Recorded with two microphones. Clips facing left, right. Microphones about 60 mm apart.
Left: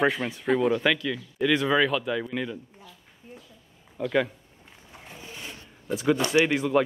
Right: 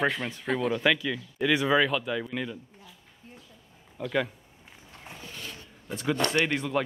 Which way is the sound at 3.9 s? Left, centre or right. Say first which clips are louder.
Left 4 dB; centre.